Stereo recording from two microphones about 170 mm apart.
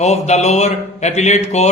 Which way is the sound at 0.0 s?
40° left (ahead or behind).